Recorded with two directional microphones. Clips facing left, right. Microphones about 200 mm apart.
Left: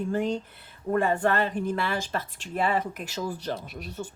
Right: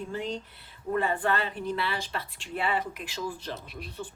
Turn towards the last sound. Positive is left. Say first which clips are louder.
# left 3 dB
turn(degrees=45)  # may be behind; listen again after turning